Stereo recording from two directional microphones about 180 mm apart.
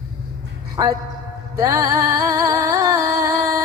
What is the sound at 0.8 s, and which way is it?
Speech, 20° right (ahead or behind).